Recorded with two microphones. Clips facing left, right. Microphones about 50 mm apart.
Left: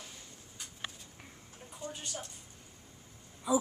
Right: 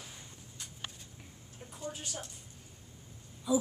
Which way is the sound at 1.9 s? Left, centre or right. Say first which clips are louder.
Right 1 dB; centre.